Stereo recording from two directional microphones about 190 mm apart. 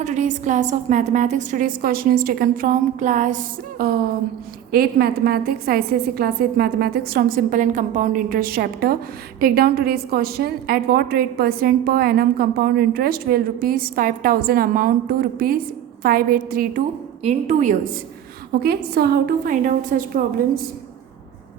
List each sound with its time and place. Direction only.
0.0 s a woman's voice: 40° right (ahead or behind)
17.2 s a woman's voice: 35° right (ahead or behind)
18.6 s a woman's voice: 55° right (ahead or behind)